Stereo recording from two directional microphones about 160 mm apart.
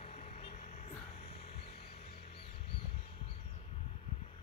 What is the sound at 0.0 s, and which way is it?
Vehicle, 40° left (ahead or behind).